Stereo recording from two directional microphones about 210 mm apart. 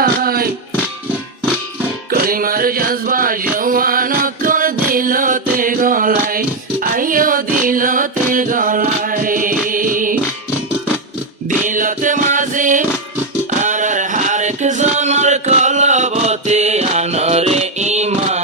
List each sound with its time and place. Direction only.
0.0 s music: 45° right (ahead or behind)
2.0 s music: 45° right (ahead or behind)
11.6 s a sound: 40° right (ahead or behind)